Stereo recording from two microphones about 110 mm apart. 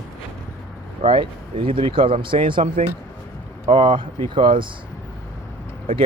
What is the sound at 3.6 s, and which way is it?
Speech, 50° right (ahead or behind).